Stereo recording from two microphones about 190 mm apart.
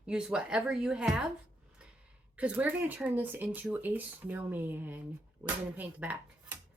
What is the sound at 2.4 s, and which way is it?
Speech, 10° right (ahead or behind).